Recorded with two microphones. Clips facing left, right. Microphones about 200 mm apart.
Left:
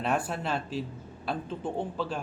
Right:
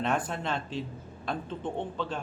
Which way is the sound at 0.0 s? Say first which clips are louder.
Even; 5° left (ahead or behind).